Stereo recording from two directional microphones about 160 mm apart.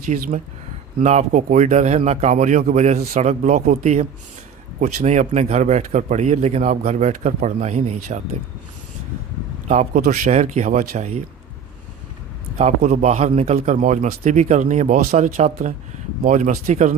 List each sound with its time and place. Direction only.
0.1 s speech: 45° right (ahead or behind)
9.6 s speech: 50° right (ahead or behind)
12.5 s speech: 45° right (ahead or behind)
16.2 s speech: 55° right (ahead or behind)